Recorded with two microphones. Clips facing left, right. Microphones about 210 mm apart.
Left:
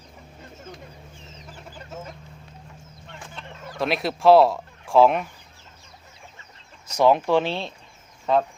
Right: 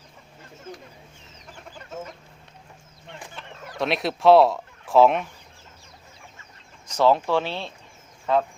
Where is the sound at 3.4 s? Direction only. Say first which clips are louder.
Left 1 dB; 5° right (ahead or behind).